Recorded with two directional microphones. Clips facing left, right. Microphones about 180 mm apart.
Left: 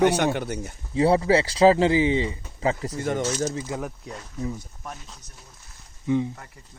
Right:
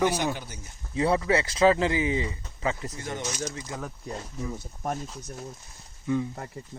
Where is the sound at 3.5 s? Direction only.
25° left (ahead or behind).